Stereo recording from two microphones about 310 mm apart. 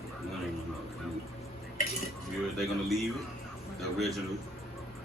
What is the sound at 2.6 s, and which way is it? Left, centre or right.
A man's voice, centre.